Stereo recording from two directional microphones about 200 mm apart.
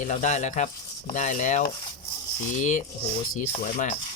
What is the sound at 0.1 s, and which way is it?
Speech, 35° left (ahead or behind).